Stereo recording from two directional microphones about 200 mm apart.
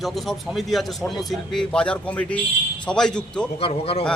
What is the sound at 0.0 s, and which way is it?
A man's voice, centre (ahead or behind).